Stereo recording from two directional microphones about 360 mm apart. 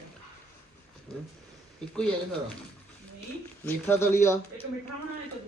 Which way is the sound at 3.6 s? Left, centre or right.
Centre.